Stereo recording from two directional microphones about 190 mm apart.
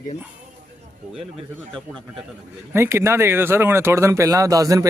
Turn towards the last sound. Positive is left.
turn(degrees=-20)  # may be behind; listen again after turning